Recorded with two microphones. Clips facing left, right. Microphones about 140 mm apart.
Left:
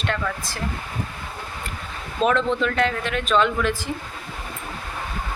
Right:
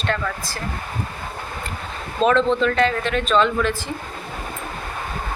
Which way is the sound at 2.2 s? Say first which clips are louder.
Right 2 dB; 25° right (ahead or behind).